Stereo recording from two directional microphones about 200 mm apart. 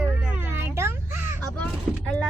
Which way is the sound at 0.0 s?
10° right (ahead or behind).